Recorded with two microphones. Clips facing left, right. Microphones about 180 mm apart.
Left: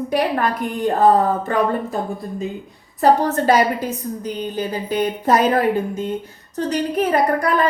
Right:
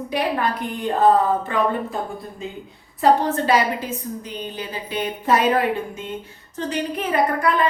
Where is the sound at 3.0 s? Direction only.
45° left (ahead or behind).